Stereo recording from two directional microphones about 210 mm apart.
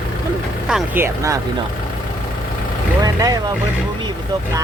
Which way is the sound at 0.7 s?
5° right (ahead or behind).